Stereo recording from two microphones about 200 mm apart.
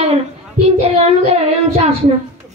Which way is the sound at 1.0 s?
30° right (ahead or behind).